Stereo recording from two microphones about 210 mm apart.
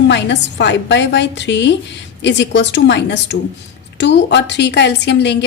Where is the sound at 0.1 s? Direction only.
55° left (ahead or behind).